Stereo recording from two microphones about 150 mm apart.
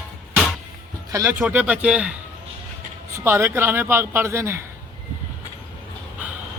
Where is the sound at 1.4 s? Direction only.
10° right (ahead or behind).